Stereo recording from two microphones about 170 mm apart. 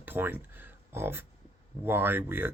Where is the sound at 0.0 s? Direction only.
10° right (ahead or behind).